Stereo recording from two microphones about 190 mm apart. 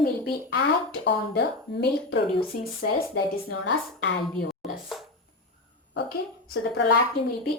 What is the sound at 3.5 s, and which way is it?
Speech, 70° left (ahead or behind).